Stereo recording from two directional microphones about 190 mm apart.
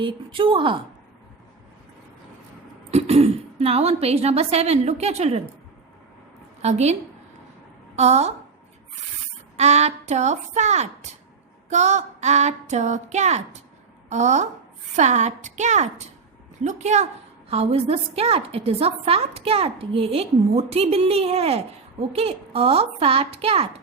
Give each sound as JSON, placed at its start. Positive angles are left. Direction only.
{"t": 0.0, "sound": "a woman's voice", "side_deg": -25}
{"t": 2.9, "sound": "a woman's voice", "side_deg": -35}
{"t": 6.6, "sound": "a woman's voice", "side_deg": -35}
{"t": 7.9, "sound": "a woman's voice", "side_deg": -35}
{"t": 9.6, "sound": "a woman's voice", "side_deg": -35}